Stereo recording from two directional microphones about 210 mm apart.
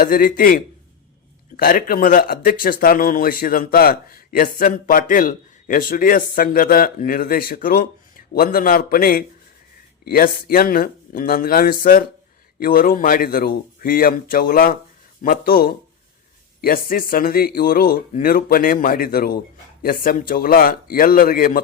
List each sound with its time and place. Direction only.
0.0 s a man's voice: 40° left (ahead or behind)